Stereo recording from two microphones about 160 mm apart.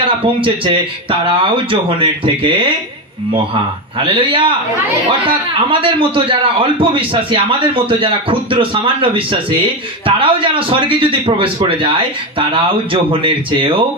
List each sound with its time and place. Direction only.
0.2 s a man's voice: 35° right (ahead or behind)
4.0 s a man's voice: 35° right (ahead or behind)